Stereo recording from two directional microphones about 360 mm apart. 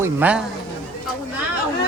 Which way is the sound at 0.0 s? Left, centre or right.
Centre.